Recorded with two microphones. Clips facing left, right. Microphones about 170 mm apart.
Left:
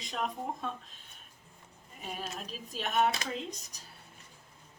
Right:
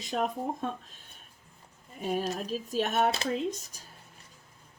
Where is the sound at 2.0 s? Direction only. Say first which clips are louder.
Right 10 dB; 45° right (ahead or behind).